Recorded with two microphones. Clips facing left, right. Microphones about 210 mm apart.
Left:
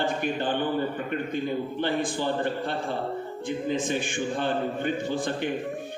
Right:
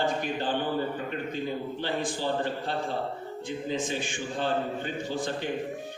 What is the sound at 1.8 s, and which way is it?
Speech, 55° left (ahead or behind).